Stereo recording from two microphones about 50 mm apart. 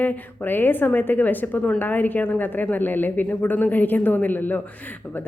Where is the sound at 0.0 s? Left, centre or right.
Left.